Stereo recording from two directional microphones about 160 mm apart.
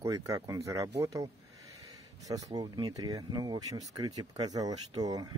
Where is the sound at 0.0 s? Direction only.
20° right (ahead or behind).